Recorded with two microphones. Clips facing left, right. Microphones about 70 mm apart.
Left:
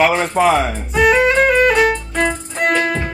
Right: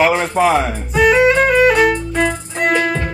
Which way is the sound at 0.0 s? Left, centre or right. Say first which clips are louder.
Even; centre.